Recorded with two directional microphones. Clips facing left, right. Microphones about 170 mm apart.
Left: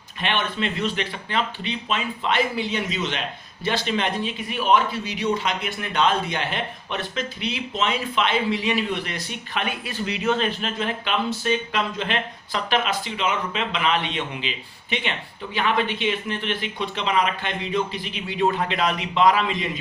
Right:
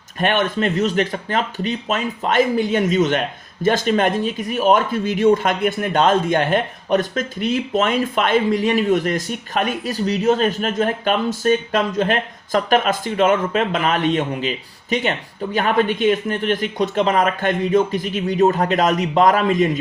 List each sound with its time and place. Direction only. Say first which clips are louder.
0.2 s speech: right 7 dB; 45° right (ahead or behind)